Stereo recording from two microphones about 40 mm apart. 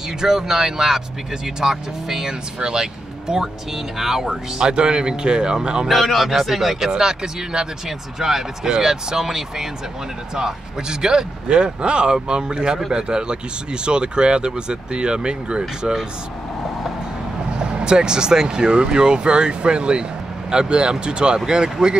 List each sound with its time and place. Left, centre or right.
0.2 s speech: centre
5.9 s speech: centre
6.9 s speech: centre
17.5 s speech: right